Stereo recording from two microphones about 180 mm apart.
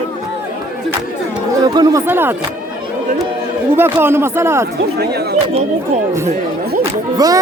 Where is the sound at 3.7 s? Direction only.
10° right (ahead or behind).